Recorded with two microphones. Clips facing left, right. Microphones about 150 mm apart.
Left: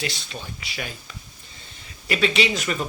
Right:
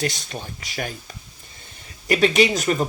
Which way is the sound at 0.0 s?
45° right (ahead or behind).